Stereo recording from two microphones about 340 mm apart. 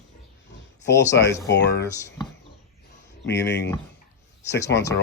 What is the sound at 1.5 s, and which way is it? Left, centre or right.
Speech, left.